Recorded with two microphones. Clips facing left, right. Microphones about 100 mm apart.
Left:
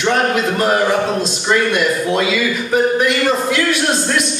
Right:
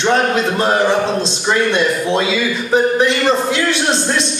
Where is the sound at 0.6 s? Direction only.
25° right (ahead or behind).